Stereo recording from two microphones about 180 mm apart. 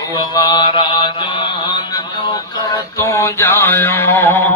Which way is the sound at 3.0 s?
15° left (ahead or behind).